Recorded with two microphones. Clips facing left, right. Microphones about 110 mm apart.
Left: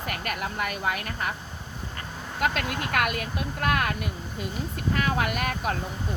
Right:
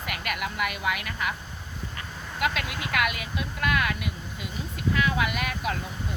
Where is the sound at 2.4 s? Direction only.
45° left (ahead or behind).